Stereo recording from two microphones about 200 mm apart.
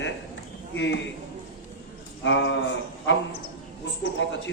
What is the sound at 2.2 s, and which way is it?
Speech, 70° left (ahead or behind).